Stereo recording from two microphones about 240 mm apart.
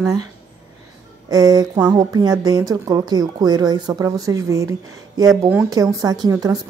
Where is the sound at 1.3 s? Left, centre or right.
Centre.